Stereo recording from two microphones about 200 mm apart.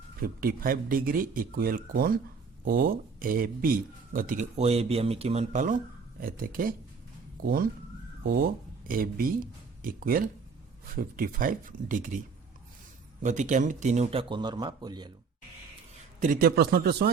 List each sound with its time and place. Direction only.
0.2 s speech: 45° right (ahead or behind)
13.2 s speech: 35° right (ahead or behind); by 15.1 s 20° right (ahead or behind)
16.2 s speech: 45° right (ahead or behind)